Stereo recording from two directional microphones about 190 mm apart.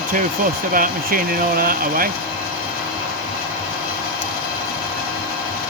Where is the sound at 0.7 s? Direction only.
50° right (ahead or behind).